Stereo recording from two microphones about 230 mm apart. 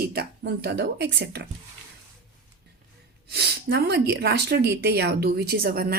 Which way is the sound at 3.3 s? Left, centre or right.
Right.